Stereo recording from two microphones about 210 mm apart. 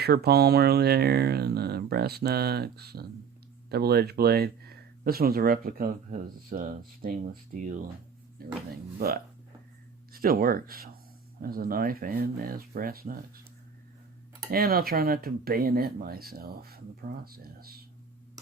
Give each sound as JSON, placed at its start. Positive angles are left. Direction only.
{"t": 0.0, "sound": "speech", "side_deg": -50}
{"t": 8.4, "sound": "speech", "side_deg": -45}
{"t": 14.5, "sound": "speech", "side_deg": -45}